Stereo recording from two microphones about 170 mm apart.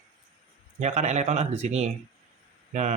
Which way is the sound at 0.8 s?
40° right (ahead or behind).